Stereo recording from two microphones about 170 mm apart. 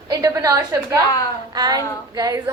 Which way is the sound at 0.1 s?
20° right (ahead or behind).